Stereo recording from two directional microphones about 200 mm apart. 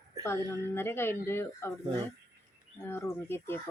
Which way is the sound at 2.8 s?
10° left (ahead or behind).